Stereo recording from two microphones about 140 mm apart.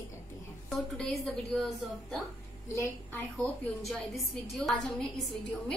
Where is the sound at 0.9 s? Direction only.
5° left (ahead or behind).